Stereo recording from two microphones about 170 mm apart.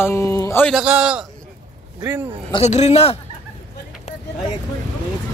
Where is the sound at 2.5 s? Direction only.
40° left (ahead or behind).